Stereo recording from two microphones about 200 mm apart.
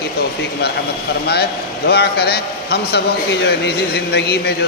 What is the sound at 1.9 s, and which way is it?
A man's voice, 55° left (ahead or behind).